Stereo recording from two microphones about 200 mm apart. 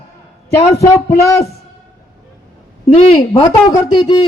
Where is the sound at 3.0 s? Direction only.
25° left (ahead or behind).